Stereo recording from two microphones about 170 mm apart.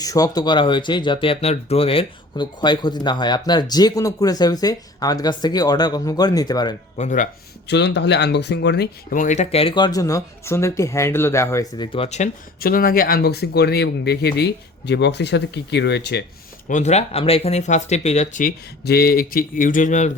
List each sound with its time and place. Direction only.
0.0 s speech: 20° left (ahead or behind)
6.9 s speech: 45° left (ahead or behind)
7.7 s speech: 90° left; by 12.3 s 40° left (ahead or behind)
12.5 s speech: 60° left (ahead or behind); by 16.2 s 80° left
16.6 s speech: 45° left (ahead or behind)
18.4 s speech: 65° left (ahead or behind); by 20.1 s 45° left (ahead or behind)